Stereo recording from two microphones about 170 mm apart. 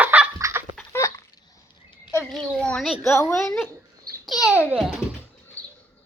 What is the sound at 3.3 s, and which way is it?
Speech, centre (ahead or behind).